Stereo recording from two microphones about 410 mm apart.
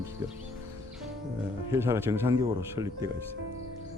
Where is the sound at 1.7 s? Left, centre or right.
Centre.